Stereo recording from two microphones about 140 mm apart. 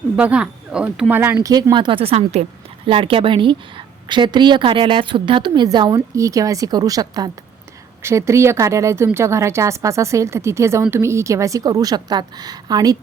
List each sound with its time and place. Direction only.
0.2 s speech: 10° right (ahead or behind)
1.5 s a woman's voice: 25° right (ahead or behind)